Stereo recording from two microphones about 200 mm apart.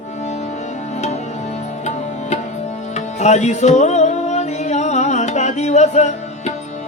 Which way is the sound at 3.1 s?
35° left (ahead or behind).